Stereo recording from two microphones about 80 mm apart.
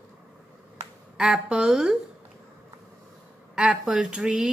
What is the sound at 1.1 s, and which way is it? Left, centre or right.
Speech, centre.